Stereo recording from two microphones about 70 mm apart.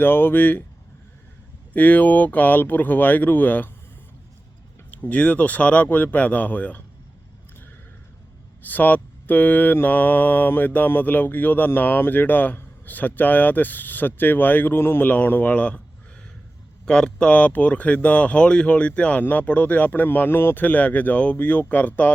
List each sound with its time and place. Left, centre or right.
0.0 s mantra: left
1.7 s mantra: left
4.9 s mantra: left
8.6 s mantra: left
16.8 s mantra: centre